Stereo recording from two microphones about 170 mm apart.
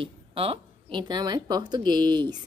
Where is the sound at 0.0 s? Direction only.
35° right (ahead or behind).